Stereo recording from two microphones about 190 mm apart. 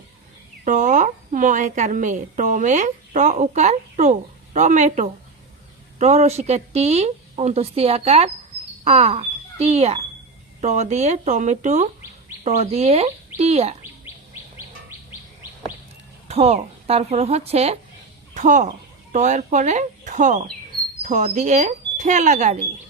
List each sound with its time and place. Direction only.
0.6 s a woman's voice: 40° right (ahead or behind)
16.3 s a woman's voice: 35° right (ahead or behind)